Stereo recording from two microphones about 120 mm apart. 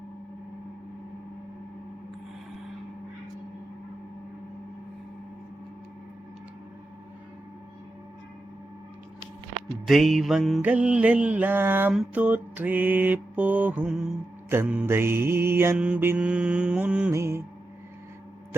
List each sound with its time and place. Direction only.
9.8 s music: centre (ahead or behind)
10.6 s mantra: 10° right (ahead or behind)
14.8 s music: 20° right (ahead or behind)
15.8 s mantra: 15° right (ahead or behind)
17.1 s music: 25° right (ahead or behind)